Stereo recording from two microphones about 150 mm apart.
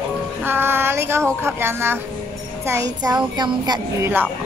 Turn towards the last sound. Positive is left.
turn(degrees=-30)  # may be behind; listen again after turning